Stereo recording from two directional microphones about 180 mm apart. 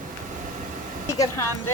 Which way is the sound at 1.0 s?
20° left (ahead or behind).